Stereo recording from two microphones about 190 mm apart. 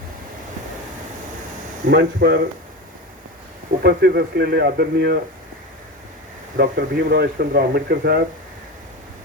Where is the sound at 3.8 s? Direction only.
60° right (ahead or behind).